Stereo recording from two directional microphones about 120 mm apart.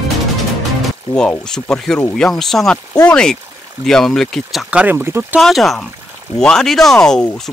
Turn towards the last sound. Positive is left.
turn(degrees=5)  # may be behind; listen again after turning